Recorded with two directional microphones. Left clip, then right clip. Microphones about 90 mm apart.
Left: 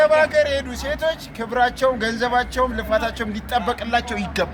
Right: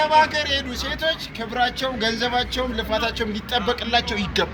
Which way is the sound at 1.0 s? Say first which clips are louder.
Even; 25° left (ahead or behind).